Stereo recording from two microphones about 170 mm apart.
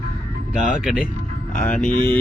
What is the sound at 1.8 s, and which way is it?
Speech, 50° left (ahead or behind).